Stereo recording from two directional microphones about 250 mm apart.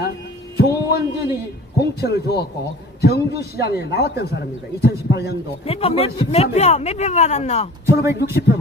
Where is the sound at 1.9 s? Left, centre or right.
Left.